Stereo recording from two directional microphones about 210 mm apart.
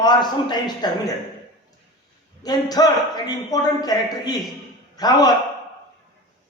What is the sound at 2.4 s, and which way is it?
A man's voice, 20° left (ahead or behind).